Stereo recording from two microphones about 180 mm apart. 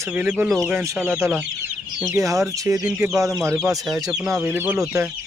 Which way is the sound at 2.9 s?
5° right (ahead or behind).